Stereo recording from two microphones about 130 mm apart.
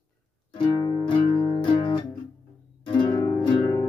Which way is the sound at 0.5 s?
30° left (ahead or behind).